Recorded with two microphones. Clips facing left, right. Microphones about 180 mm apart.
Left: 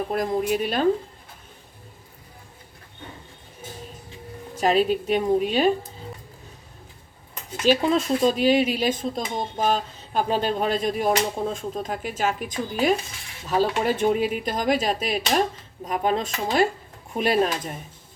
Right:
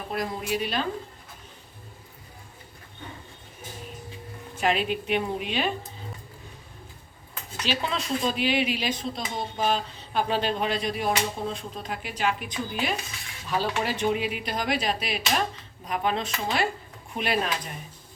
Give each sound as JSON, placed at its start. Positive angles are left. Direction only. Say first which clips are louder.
{"t": 0.1, "sound": "speech", "louder": "left 4 dB", "side_deg": 45}
{"t": 4.5, "sound": "a woman's voice", "louder": "left 5 dB", "side_deg": 40}
{"t": 7.6, "sound": "a woman's voice", "louder": "left 10 dB", "side_deg": 45}